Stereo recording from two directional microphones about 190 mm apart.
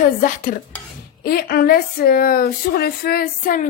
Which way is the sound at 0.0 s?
45° left (ahead or behind).